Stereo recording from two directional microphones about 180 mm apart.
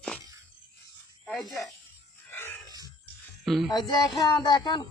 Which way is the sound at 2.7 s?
20° right (ahead or behind).